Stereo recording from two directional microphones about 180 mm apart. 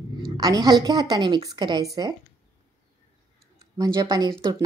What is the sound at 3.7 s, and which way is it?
Speech, 20° right (ahead or behind).